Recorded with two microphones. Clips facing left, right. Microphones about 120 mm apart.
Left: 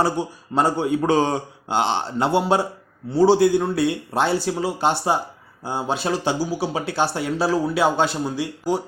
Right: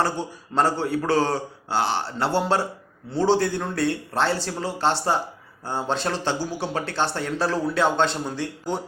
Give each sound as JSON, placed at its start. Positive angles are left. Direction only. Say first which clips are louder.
{"t": 0.0, "sound": "speech", "louder": "left 3 dB", "side_deg": 10}